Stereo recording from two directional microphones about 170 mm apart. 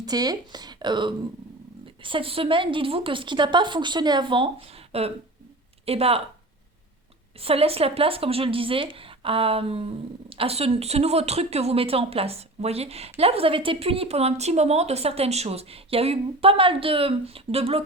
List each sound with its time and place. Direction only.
0.0 s a woman's voice: 20° right (ahead or behind)
7.4 s speech: 35° right (ahead or behind)